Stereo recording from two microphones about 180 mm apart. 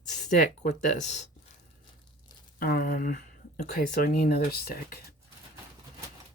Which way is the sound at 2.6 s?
55° left (ahead or behind).